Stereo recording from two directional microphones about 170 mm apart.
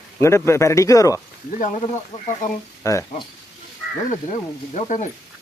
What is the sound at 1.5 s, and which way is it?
Speech, 45° left (ahead or behind).